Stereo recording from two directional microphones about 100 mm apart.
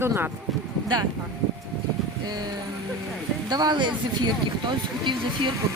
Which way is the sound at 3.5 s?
45° right (ahead or behind).